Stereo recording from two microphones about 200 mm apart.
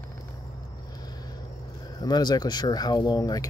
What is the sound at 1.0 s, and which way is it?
Vehicle, 20° left (ahead or behind).